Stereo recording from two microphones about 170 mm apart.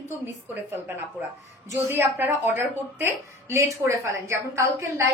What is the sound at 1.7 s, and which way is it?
A woman's voice, 15° right (ahead or behind).